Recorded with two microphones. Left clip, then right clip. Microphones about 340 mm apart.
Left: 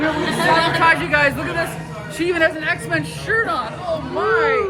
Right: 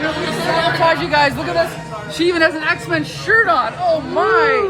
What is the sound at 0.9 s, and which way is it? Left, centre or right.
Speech, centre.